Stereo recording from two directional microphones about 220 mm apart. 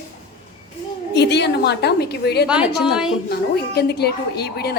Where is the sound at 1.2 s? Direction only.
50° left (ahead or behind).